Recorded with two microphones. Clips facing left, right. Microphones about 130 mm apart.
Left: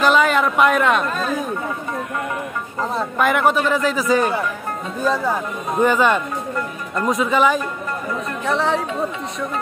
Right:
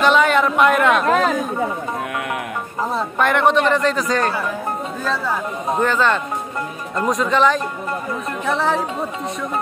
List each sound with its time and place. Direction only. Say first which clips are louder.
0.0 s a sound: right 1 dB; centre (ahead or behind)
1.0 s speech: right 7 dB; 90° right
2.9 s a man's voice: even; centre (ahead or behind)